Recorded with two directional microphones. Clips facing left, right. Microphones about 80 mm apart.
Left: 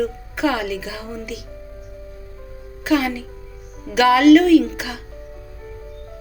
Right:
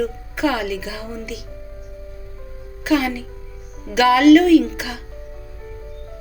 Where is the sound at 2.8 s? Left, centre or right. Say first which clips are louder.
Even; left.